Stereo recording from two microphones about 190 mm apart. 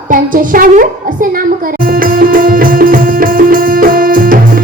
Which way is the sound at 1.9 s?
50° right (ahead or behind).